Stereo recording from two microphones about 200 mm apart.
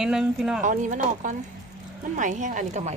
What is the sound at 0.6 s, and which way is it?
A woman's voice, 40° right (ahead or behind).